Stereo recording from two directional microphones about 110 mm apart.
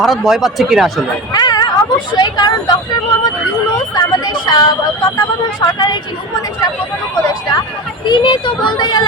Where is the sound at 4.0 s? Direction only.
40° left (ahead or behind).